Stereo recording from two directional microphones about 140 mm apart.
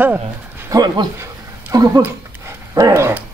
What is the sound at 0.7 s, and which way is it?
Speech, 30° right (ahead or behind).